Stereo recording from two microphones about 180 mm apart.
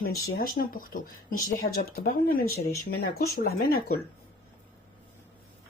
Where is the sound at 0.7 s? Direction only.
50° left (ahead or behind).